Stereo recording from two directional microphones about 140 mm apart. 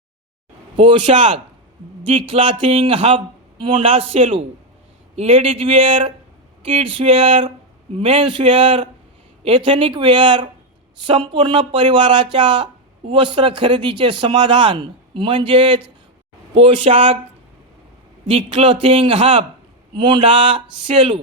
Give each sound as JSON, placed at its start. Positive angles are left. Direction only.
{"t": 0.8, "sound": "a man's voice", "side_deg": -40}
{"t": 18.3, "sound": "a man's voice", "side_deg": -40}